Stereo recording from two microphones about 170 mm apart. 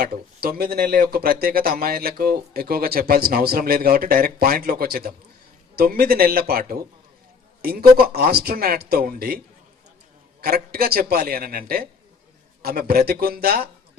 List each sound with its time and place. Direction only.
0.0 s speech: 65° right (ahead or behind)
10.4 s speech: 65° right (ahead or behind)